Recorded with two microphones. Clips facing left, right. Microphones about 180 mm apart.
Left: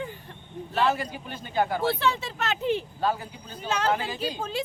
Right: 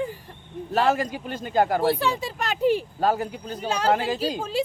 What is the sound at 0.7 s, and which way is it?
Speech, 45° right (ahead or behind).